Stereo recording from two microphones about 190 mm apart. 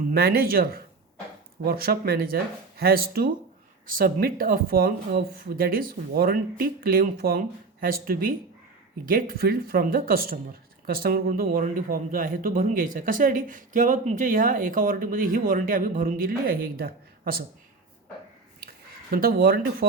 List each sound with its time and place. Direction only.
0.1 s speech: 55° right (ahead or behind)
19.1 s speech: 50° right (ahead or behind)